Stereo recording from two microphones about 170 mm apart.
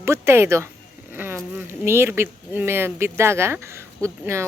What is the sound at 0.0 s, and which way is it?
Speech, 15° right (ahead or behind).